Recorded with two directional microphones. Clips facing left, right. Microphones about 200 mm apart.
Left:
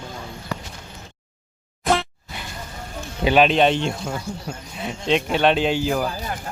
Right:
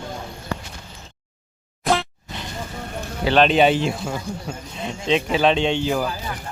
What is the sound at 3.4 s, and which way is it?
Speech, 5° right (ahead or behind).